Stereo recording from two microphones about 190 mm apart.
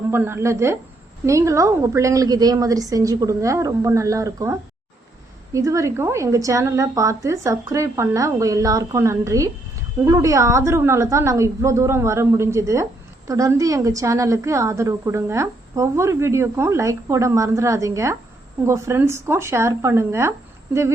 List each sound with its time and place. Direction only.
0.1 s a woman's voice: 10° right (ahead or behind)
5.5 s a woman's voice: 15° right (ahead or behind)